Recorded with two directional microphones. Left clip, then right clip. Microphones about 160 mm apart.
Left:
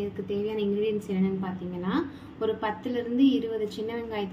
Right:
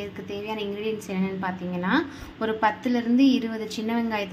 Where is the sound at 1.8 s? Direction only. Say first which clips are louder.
Right 5 dB; 25° right (ahead or behind).